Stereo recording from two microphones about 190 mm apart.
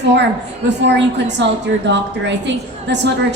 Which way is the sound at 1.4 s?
70° right (ahead or behind).